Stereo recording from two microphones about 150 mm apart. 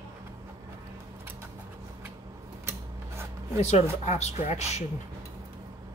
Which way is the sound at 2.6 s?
15° right (ahead or behind).